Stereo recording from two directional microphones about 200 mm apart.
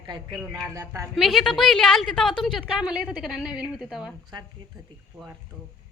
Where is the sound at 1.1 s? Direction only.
Centre (ahead or behind).